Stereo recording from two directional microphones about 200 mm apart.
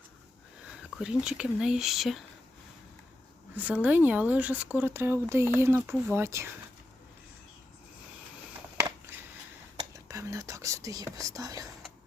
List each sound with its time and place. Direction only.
0.7 s speech: 5° right (ahead or behind)
3.5 s speech: 10° right (ahead or behind)
9.9 s speech: 15° right (ahead or behind)